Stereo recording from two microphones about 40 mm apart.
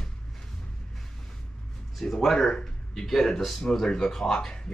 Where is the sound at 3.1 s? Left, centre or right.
Centre.